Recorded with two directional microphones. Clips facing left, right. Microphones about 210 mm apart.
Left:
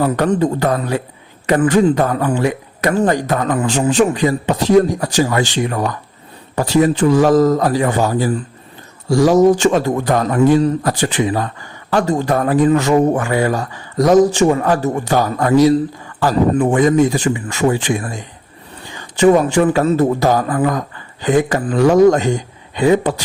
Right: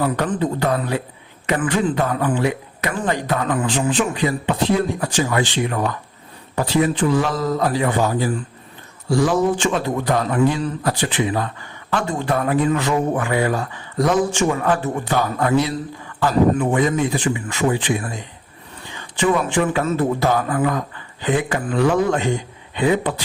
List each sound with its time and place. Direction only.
0.0 s a man's voice: 40° left (ahead or behind)